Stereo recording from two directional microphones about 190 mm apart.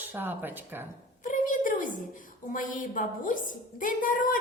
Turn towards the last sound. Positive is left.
turn(degrees=45)  # may be behind; listen again after turning